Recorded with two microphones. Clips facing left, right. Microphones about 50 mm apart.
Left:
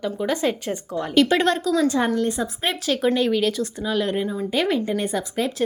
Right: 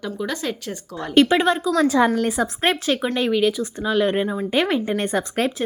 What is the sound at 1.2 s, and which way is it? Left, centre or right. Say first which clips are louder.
Speech: right 1 dB; centre.